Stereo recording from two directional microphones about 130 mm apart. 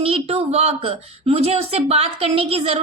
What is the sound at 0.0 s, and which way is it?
A woman's voice, 45° right (ahead or behind).